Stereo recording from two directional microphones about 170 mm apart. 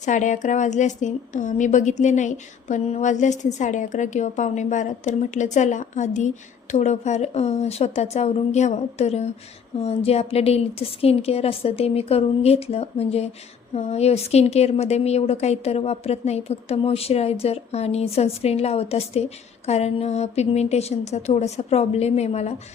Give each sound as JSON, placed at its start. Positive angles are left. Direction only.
{"t": 0.0, "sound": "a woman's voice", "side_deg": 45}